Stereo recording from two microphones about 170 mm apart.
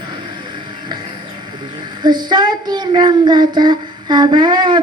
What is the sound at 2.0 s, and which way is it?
Child singing, 25° right (ahead or behind).